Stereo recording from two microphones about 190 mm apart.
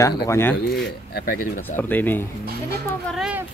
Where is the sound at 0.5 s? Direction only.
55° left (ahead or behind).